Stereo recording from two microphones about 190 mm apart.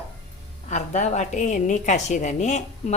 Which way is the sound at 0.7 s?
40° left (ahead or behind).